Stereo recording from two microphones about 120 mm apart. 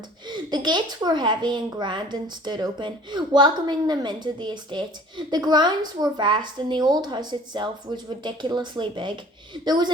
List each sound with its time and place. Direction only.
0.3 s a child's voice: 40° right (ahead or behind)